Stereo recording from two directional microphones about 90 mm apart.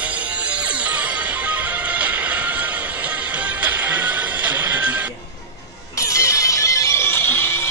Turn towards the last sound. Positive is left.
turn(degrees=25)  # may be behind; listen again after turning